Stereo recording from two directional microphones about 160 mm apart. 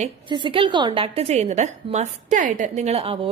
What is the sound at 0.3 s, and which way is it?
A woman's voice, 30° right (ahead or behind).